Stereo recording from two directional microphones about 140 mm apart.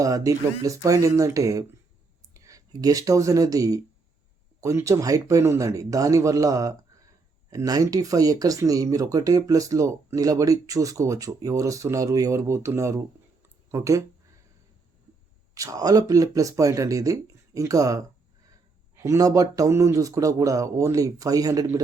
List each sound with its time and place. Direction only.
0.0 s speech: 25° right (ahead or behind)
15.5 s speech: 25° right (ahead or behind)